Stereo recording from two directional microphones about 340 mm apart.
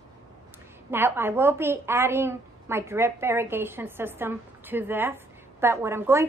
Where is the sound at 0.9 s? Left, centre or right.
Centre.